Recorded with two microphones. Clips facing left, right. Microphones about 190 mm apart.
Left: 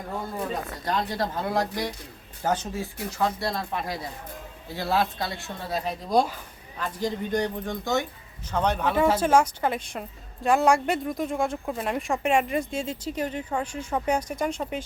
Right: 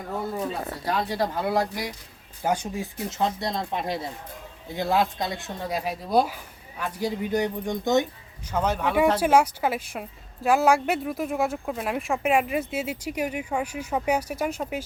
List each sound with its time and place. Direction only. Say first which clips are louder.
0.9 s a woman's voice: right 1 dB; 10° right (ahead or behind)
8.4 s a woman's voice: even; 5° right (ahead or behind)